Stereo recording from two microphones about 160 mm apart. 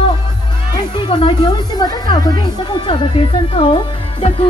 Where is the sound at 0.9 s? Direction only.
30° left (ahead or behind).